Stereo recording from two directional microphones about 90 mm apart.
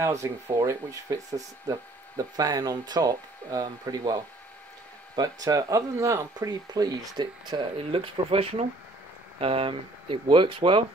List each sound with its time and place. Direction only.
0.0 s speech: 35° right (ahead or behind); by 7.6 s 50° right (ahead or behind)
7.9 s speech: 85° right; by 10.9 s 70° right (ahead or behind)